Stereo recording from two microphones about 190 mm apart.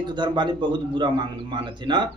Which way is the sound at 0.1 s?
25° right (ahead or behind).